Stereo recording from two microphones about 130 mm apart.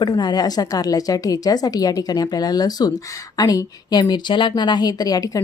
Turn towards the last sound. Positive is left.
turn(degrees=30)  # may be behind; listen again after turning